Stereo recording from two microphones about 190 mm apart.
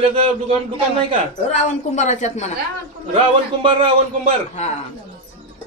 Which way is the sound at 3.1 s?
30° right (ahead or behind).